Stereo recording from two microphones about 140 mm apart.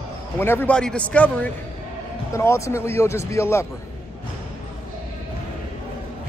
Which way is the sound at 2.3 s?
20° left (ahead or behind).